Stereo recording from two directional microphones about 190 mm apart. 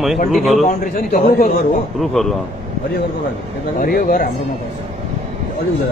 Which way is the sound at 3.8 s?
50° left (ahead or behind).